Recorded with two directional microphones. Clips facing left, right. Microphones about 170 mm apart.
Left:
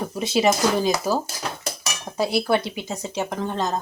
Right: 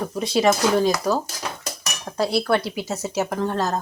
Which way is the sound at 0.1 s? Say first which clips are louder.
Right 1 dB; centre (ahead or behind).